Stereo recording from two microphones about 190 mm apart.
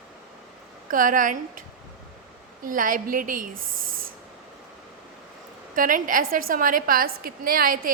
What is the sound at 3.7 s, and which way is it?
Spray, 90° right.